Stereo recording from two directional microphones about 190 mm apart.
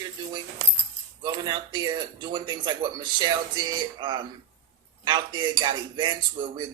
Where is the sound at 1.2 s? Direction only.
25° right (ahead or behind).